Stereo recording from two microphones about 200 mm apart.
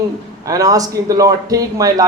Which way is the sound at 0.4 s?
15° right (ahead or behind).